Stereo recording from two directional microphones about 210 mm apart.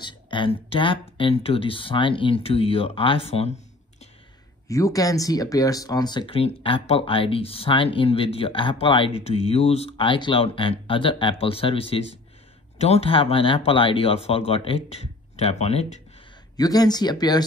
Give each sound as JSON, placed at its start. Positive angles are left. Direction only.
{"t": 0.0, "sound": "speech", "side_deg": 25}
{"t": 4.6, "sound": "speech", "side_deg": 15}
{"t": 16.5, "sound": "speech", "side_deg": 20}